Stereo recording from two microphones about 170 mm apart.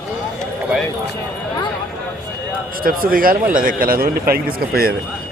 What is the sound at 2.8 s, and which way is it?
A man's voice, 60° right (ahead or behind).